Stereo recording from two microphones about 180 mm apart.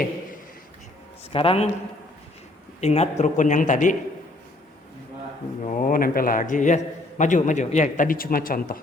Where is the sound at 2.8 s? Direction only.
40° left (ahead or behind).